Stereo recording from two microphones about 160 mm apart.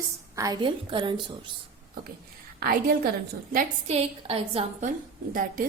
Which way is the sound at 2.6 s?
65° right (ahead or behind).